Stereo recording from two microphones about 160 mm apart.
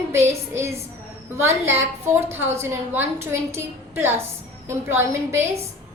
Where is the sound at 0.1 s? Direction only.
15° right (ahead or behind).